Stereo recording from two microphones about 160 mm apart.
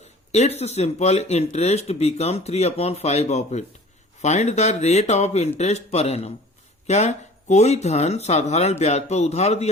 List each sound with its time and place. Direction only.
0.3 s speech: 45° left (ahead or behind)